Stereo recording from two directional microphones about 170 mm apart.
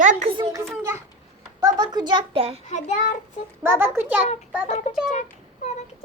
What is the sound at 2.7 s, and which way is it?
Child singing, 45° left (ahead or behind).